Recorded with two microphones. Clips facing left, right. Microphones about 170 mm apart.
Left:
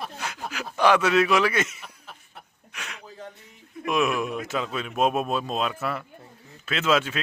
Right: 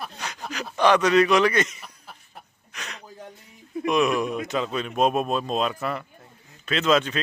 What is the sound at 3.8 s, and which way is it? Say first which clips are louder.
Speech: right 2 dB; 5° left (ahead or behind).